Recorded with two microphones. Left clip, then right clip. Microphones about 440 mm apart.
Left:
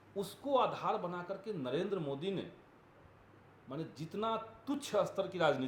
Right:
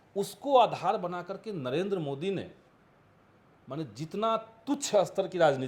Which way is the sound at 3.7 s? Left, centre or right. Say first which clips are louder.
Right 6 dB; right.